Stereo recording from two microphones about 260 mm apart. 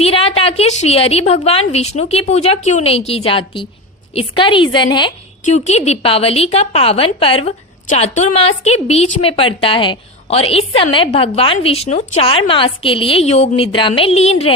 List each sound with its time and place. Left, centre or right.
0.0 s a woman's voice: left
5.4 s a woman's voice: left